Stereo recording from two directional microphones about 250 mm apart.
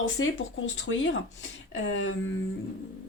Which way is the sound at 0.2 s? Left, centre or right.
Left.